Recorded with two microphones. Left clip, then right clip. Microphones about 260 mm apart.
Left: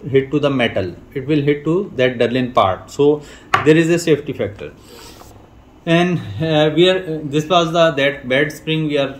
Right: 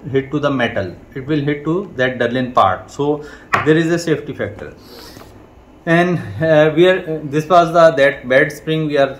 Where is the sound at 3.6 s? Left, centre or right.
Left.